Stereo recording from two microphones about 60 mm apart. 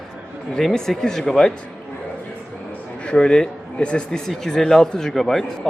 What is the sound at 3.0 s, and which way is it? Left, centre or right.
A man's voice, centre.